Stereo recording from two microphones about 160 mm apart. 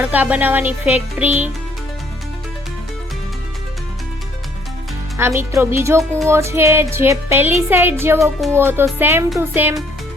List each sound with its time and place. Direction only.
0.0 s speech: 10° right (ahead or behind)
5.1 s speech: 15° right (ahead or behind)